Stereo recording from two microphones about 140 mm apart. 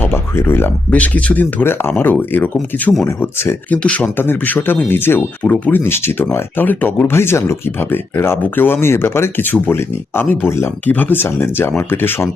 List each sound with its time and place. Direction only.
0.0 s speech: 15° left (ahead or behind)